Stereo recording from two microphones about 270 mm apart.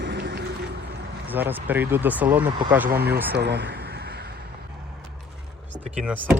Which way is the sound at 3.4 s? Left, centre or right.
Right.